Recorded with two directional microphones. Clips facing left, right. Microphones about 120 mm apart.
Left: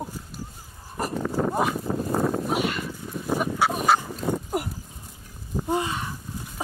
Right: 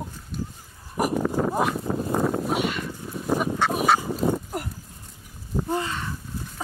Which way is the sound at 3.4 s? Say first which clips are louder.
Left 1 dB; 5° right (ahead or behind).